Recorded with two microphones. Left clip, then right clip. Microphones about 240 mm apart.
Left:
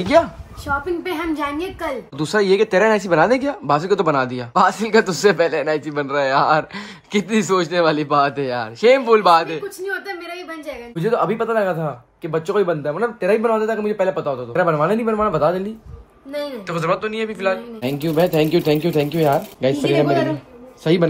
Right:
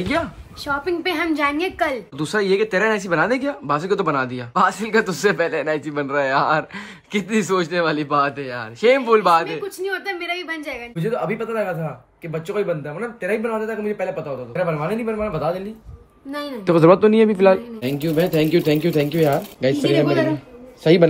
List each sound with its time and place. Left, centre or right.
0.7 s speech: centre
11.0 s speech: centre
16.6 s a man's voice: right
17.8 s speech: centre